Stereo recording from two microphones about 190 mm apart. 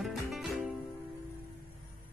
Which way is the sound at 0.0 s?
Centre (ahead or behind).